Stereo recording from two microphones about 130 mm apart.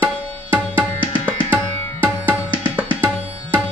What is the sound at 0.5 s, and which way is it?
Tabla, 15° right (ahead or behind).